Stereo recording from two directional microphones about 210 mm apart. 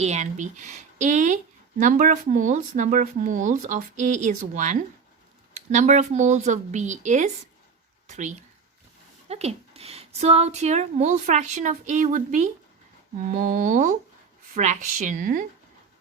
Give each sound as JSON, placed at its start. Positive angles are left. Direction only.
{"t": 0.0, "sound": "speech", "side_deg": -35}